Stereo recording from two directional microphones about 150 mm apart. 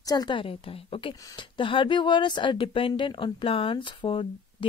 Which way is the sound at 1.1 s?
25° left (ahead or behind).